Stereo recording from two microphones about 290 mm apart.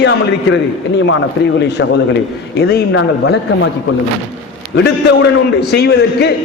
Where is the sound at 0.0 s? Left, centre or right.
Left.